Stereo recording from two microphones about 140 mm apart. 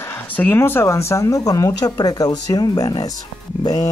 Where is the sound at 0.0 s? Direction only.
15° left (ahead or behind).